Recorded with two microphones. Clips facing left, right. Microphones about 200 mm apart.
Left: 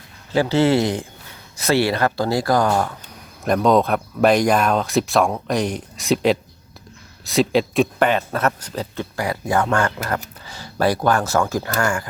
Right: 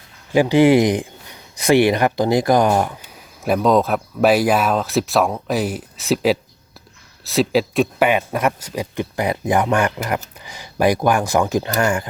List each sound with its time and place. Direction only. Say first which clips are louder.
0.3 s speech: right 4 dB; 15° right (ahead or behind)
3.4 s speech: even; 5° right (ahead or behind); by 12.0 s 20° right (ahead or behind)